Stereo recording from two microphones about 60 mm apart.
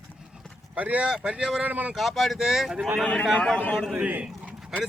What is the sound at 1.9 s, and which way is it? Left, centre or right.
Speech, centre.